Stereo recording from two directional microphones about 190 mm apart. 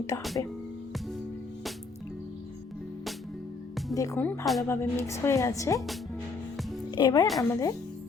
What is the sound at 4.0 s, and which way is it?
A woman's voice, 15° left (ahead or behind).